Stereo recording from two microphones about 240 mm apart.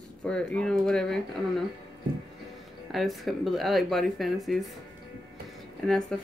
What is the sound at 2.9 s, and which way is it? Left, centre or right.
Speech, centre.